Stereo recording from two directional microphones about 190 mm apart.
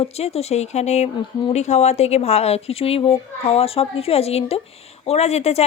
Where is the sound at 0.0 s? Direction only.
30° left (ahead or behind).